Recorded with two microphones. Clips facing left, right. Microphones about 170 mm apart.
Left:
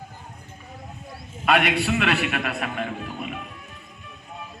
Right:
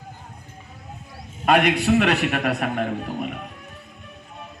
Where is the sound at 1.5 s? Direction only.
40° right (ahead or behind).